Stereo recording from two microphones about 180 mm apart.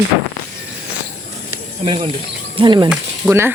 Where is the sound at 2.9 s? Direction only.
10° right (ahead or behind).